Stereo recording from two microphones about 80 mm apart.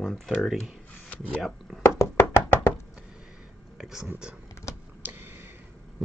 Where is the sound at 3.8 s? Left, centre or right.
Centre.